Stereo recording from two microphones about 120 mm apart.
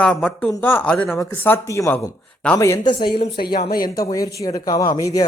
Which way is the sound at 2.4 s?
10° left (ahead or behind).